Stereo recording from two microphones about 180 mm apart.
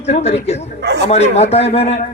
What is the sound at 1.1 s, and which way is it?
Speech, 35° left (ahead or behind).